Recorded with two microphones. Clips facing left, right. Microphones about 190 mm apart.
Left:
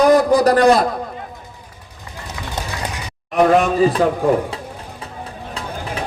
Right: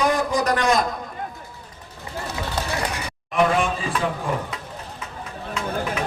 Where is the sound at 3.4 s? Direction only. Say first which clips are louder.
Left 8 dB; 45° left (ahead or behind).